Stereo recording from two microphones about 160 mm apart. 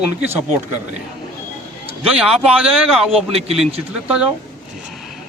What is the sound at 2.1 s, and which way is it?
A man's voice, 5° right (ahead or behind).